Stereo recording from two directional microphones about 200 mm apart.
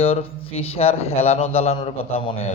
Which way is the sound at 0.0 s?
30° left (ahead or behind).